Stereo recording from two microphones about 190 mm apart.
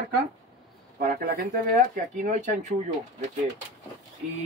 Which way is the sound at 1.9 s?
45° right (ahead or behind).